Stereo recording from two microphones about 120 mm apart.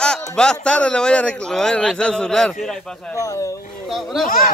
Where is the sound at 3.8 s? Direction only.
Centre (ahead or behind).